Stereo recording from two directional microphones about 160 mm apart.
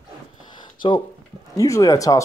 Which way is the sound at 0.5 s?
30° left (ahead or behind).